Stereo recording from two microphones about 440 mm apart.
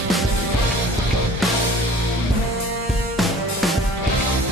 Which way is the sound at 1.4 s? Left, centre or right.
Centre.